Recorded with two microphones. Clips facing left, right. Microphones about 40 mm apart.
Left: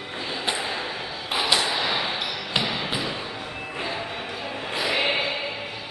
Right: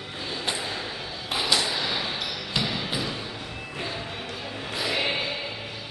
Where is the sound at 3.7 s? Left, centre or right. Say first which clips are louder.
Left 3 dB; centre.